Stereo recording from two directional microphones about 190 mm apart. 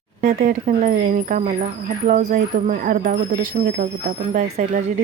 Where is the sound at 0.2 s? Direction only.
45° right (ahead or behind).